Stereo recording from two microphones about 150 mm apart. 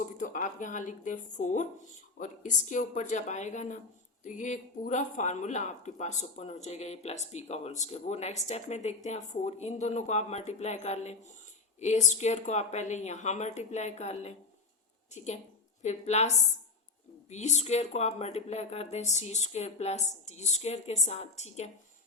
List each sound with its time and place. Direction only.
0.2 s speech: 60° left (ahead or behind)
15.8 s speech: 50° left (ahead or behind)